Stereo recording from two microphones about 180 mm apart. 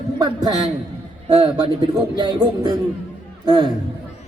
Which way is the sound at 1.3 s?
30° right (ahead or behind).